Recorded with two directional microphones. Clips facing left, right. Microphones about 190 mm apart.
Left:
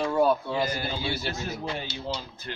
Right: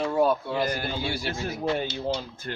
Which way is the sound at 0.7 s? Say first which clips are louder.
Right 1 dB; 50° right (ahead or behind).